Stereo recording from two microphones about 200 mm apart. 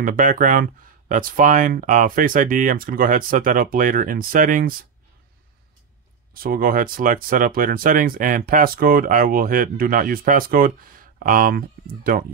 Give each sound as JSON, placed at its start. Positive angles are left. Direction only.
{"t": 0.0, "sound": "speech", "side_deg": -45}
{"t": 6.3, "sound": "speech", "side_deg": -45}